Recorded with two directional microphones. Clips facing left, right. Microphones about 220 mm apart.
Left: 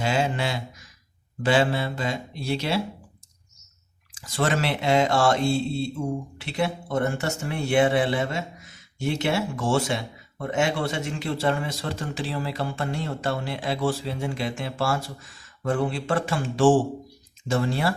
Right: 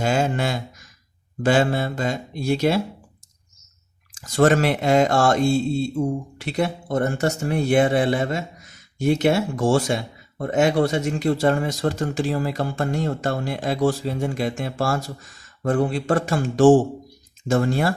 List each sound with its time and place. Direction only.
0.0 s speech: 45° right (ahead or behind)
4.2 s speech: 45° right (ahead or behind)